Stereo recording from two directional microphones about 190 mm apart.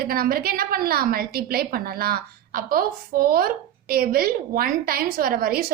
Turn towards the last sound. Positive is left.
turn(degrees=-50)  # may be behind; listen again after turning